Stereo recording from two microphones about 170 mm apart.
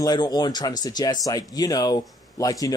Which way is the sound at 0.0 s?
25° left (ahead or behind).